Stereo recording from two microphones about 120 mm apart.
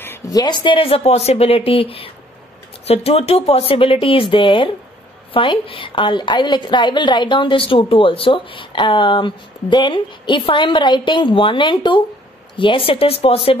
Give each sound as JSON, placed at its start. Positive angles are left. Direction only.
{"t": 0.3, "sound": "a woman's voice", "side_deg": 35}